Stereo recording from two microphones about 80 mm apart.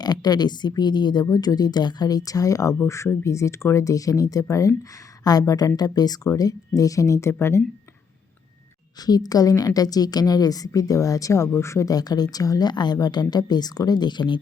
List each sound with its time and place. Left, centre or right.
0.0 s speech: left
9.0 s speech: left
11.9 s speech: left